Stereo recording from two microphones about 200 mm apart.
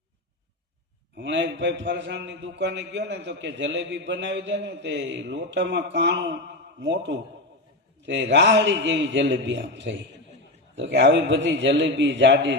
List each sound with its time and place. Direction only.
1.1 s a man's voice: 65° right (ahead or behind)